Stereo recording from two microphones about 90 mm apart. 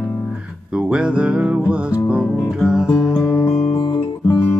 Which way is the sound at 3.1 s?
35° left (ahead or behind).